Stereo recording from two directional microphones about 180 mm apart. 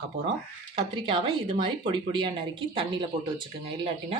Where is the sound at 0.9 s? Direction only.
30° right (ahead or behind).